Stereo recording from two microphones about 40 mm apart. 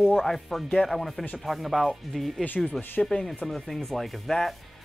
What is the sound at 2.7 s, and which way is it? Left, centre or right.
Speech, left.